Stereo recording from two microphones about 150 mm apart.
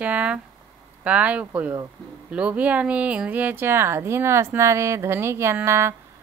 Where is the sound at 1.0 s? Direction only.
10° right (ahead or behind).